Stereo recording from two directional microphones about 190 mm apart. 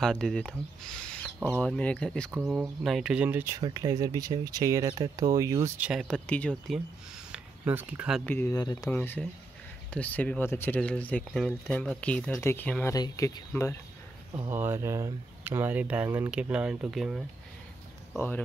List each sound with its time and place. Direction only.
0.0 s speech: centre (ahead or behind)
3.6 s speech: 20° right (ahead or behind); by 6.8 s 5° left (ahead or behind)
7.3 s speech: 10° right (ahead or behind)
8.3 s speech: 10° left (ahead or behind)
12.9 s speech: 20° left (ahead or behind)
14.3 s speech: 10° right (ahead or behind)